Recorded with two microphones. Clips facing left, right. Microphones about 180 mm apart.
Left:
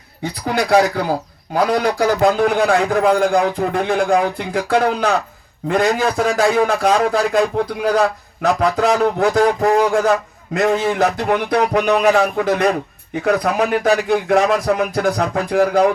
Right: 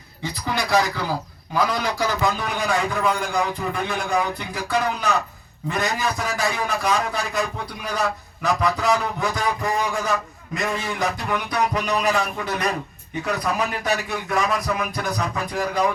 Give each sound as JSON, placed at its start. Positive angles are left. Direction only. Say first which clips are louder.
{"t": 0.2, "sound": "a man's voice", "louder": "left 6 dB", "side_deg": 60}